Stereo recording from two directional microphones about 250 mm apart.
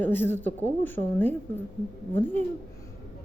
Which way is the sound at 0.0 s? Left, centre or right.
Centre.